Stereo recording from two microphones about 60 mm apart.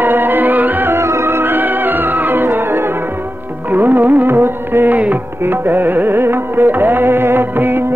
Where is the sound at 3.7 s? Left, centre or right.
Right.